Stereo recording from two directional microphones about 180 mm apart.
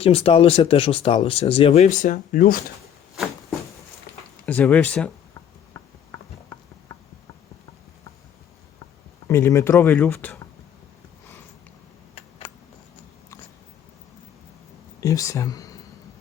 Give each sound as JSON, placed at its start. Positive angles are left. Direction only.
{"t": 0.0, "sound": "speech", "side_deg": 30}
{"t": 4.4, "sound": "speech", "side_deg": 10}
{"t": 9.2, "sound": "speech", "side_deg": 15}
{"t": 15.0, "sound": "speech", "side_deg": 15}